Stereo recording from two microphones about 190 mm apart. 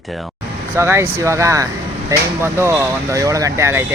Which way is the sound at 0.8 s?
15° right (ahead or behind).